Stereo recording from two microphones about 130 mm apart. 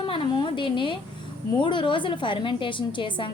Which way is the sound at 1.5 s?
40° left (ahead or behind).